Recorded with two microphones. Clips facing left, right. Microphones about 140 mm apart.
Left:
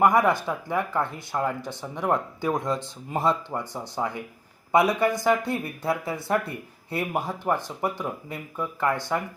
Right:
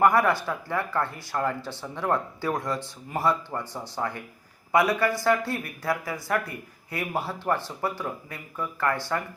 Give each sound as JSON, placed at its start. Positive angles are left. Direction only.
{"t": 0.0, "sound": "speech", "side_deg": 15}